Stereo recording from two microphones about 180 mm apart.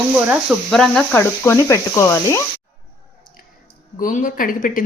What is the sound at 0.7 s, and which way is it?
Speech, centre (ahead or behind).